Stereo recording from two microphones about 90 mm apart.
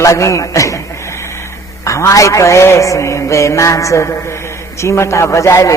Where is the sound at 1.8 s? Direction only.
35° left (ahead or behind).